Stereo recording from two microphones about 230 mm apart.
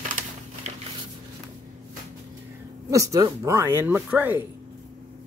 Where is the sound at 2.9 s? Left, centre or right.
Centre.